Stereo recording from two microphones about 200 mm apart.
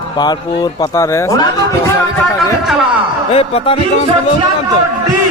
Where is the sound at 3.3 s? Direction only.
30° left (ahead or behind).